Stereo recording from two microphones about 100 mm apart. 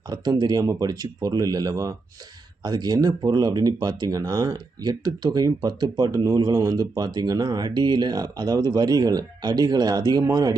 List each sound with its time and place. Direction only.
0.1 s speech: 45° right (ahead or behind)